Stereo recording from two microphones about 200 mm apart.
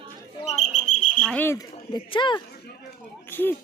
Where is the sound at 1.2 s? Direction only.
5° left (ahead or behind); by 2.4 s 25° left (ahead or behind).